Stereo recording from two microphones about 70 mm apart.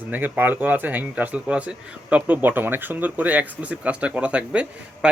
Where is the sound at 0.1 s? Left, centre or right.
Right.